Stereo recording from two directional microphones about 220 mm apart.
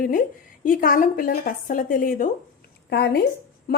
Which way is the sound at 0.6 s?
40° left (ahead or behind).